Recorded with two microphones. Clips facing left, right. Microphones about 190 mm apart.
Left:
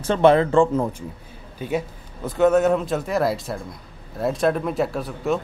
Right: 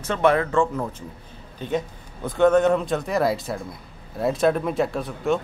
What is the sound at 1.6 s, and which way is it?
A man's voice, 10° left (ahead or behind).